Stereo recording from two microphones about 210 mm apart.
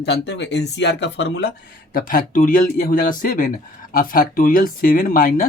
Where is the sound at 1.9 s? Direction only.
40° left (ahead or behind).